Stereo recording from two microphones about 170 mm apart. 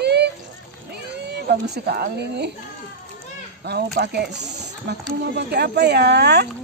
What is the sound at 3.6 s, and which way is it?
Speech, 75° right (ahead or behind).